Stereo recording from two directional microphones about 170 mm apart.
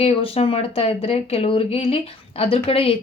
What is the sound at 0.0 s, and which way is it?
Speech, 35° left (ahead or behind).